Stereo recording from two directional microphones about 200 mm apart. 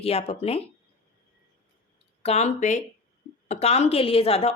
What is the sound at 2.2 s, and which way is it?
Speech, 35° left (ahead or behind).